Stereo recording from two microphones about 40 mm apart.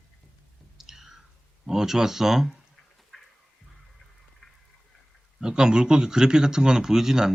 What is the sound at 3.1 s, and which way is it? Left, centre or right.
Music, centre.